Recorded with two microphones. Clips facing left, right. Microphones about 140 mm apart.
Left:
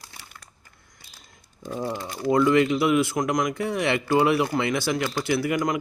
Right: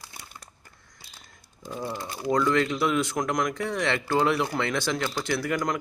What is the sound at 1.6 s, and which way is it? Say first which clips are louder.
Speech: left 3 dB; 15° left (ahead or behind).